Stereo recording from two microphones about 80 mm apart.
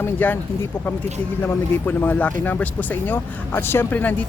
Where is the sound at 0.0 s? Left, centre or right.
Left.